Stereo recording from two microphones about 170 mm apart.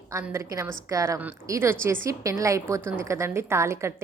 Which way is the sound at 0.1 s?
15° right (ahead or behind).